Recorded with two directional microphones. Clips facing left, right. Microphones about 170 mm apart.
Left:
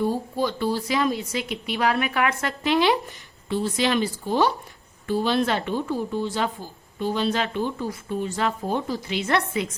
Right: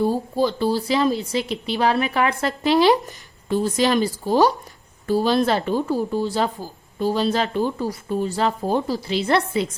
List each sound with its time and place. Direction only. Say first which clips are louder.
0.0 s speech: right 4 dB; 30° right (ahead or behind)